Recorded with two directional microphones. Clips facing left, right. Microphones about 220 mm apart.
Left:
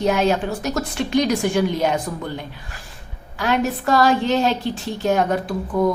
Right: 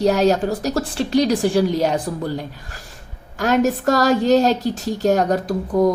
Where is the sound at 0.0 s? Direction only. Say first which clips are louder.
Right 3 dB; 40° right (ahead or behind).